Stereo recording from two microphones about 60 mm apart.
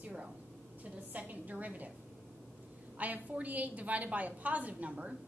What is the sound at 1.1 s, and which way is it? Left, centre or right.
Speech, right.